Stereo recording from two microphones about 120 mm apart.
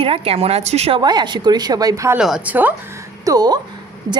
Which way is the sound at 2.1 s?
5° right (ahead or behind).